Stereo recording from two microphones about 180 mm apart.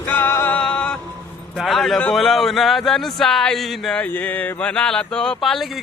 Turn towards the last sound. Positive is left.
turn(degrees=0)  # may be behind; listen again after turning